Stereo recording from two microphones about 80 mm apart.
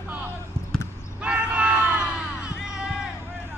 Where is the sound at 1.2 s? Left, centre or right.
Centre.